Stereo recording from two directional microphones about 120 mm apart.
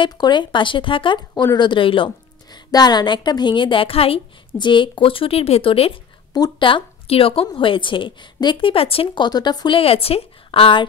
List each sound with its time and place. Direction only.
0.0 s a woman's voice: 40° left (ahead or behind)
4.6 s a woman's voice: 40° left (ahead or behind)
9.8 s a woman's voice: 55° left (ahead or behind)